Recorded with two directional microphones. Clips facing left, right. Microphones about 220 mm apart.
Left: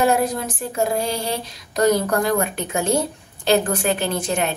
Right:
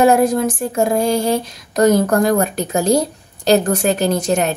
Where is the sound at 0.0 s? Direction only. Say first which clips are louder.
Right 6 dB; 45° right (ahead or behind).